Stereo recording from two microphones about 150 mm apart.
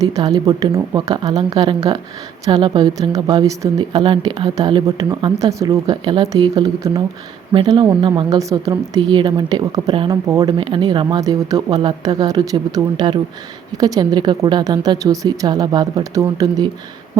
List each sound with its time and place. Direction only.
0.0 s speech: 25° right (ahead or behind)